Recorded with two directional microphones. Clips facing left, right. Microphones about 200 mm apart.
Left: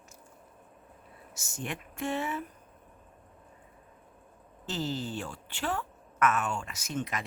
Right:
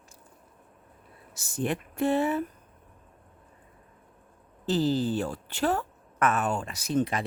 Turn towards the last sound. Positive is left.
turn(degrees=-35)  # may be behind; listen again after turning